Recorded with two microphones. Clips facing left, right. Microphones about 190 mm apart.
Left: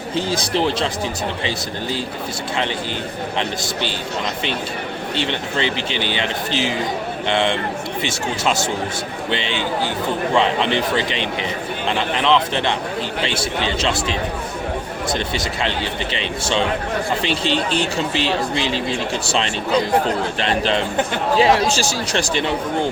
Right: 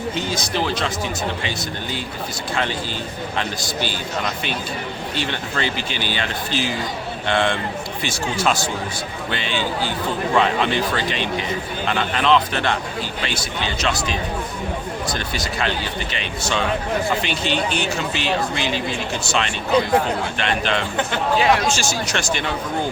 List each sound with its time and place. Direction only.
0.2 s speech: 30° left (ahead or behind)
3.3 s speech: 25° left (ahead or behind)
5.1 s speech: 25° left (ahead or behind)
16.1 s speech: 25° left (ahead or behind)